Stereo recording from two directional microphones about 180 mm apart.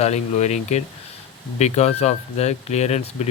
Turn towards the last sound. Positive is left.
turn(degrees=35)  # may be behind; listen again after turning